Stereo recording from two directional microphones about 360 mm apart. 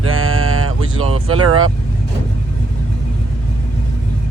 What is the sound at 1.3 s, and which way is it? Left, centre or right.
Speech, right.